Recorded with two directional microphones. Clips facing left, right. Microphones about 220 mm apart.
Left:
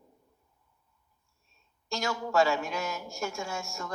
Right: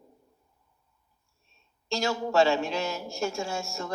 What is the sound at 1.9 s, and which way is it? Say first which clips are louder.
A man's voice: right 4 dB; 25° right (ahead or behind).